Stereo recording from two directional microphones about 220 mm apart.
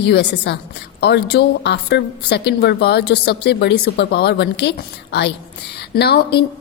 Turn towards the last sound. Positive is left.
turn(degrees=45)  # may be behind; listen again after turning